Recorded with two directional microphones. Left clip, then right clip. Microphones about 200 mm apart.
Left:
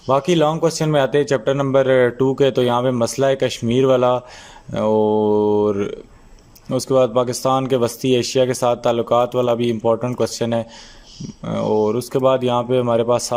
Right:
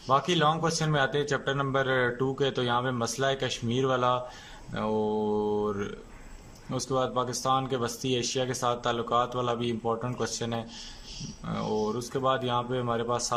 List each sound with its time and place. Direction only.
0.1 s speech: 35° left (ahead or behind)